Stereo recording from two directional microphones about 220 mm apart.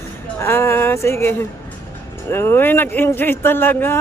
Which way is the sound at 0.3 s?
10° left (ahead or behind).